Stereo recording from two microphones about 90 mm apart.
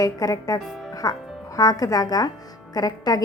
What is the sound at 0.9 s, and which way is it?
Music, 40° left (ahead or behind).